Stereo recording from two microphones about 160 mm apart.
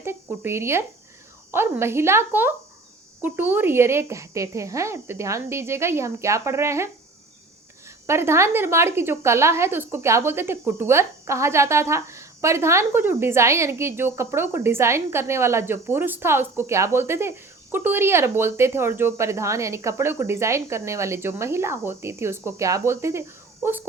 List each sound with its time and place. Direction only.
0.0 s a woman's voice: 15° right (ahead or behind)